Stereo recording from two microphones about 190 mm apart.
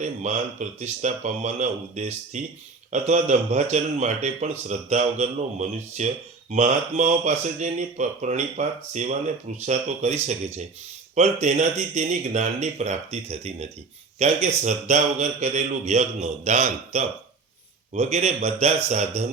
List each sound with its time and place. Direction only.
0.0 s speech: 40° right (ahead or behind)